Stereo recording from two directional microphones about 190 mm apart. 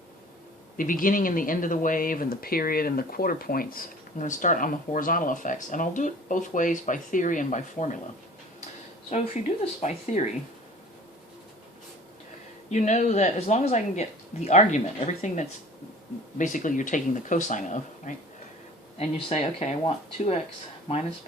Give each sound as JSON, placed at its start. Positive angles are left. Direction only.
{"t": 0.8, "sound": "speech", "side_deg": 45}
{"t": 9.0, "sound": "speech", "side_deg": 35}
{"t": 12.7, "sound": "speech", "side_deg": 40}